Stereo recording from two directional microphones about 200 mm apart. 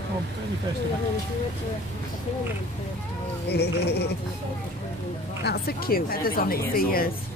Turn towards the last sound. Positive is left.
turn(degrees=45)  # may be behind; listen again after turning